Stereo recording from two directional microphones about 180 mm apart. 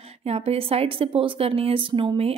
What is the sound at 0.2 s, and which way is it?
A woman's voice, 35° right (ahead or behind).